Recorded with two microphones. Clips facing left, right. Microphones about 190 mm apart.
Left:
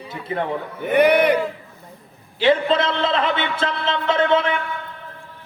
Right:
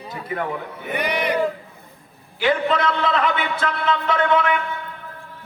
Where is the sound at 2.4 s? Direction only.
25° left (ahead or behind).